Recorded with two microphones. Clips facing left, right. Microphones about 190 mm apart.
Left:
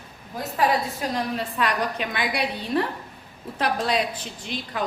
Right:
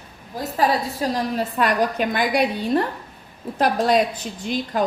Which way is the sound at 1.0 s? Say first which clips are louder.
Right 5 dB; 35° right (ahead or behind).